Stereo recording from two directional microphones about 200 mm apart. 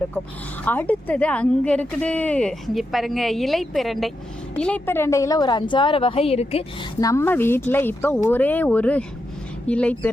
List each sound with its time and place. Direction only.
0.6 s a woman's voice: 10° left (ahead or behind); by 6.7 s 30° left (ahead or behind)
7.0 s speech: 15° left (ahead or behind)